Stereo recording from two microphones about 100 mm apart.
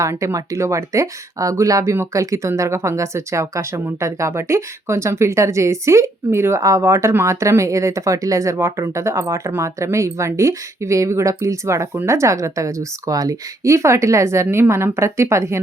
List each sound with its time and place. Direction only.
0.0 s a woman's voice: 30° right (ahead or behind)